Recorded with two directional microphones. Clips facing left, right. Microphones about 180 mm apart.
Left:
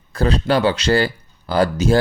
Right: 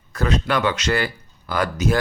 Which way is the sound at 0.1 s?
30° left (ahead or behind).